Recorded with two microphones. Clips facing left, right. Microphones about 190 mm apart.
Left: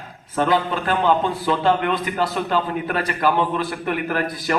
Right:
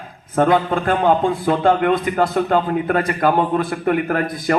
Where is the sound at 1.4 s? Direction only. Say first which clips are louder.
Right 4 dB; 50° right (ahead or behind).